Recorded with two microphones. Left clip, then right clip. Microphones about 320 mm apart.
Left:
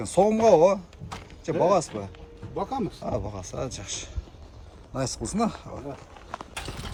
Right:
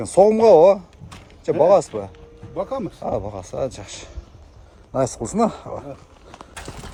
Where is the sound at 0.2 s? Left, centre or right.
Right.